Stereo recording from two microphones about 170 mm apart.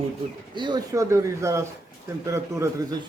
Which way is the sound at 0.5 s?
25° right (ahead or behind).